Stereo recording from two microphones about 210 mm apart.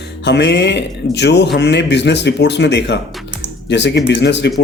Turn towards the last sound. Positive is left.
turn(degrees=55)  # may be behind; listen again after turning